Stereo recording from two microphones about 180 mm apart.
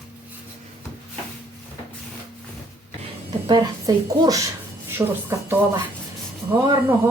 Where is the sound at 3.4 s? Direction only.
25° right (ahead or behind).